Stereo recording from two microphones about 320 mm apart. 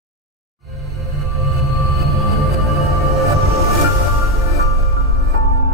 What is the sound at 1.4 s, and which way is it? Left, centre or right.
Train, centre.